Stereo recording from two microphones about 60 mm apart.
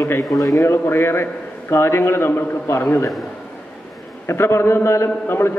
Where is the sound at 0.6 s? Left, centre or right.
Left.